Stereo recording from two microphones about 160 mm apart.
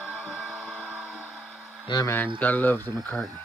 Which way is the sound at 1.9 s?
20° left (ahead or behind).